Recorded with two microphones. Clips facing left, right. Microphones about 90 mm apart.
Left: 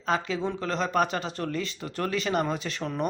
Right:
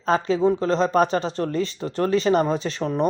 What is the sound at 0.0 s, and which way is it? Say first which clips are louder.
Speech: right 8 dB; 35° right (ahead or behind).